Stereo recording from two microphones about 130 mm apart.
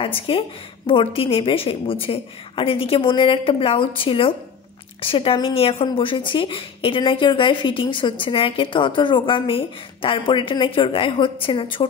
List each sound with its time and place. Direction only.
0.0 s a woman's voice: 45° left (ahead or behind)